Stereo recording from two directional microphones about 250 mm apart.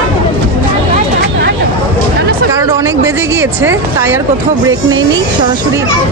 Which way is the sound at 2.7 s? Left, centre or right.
Centre.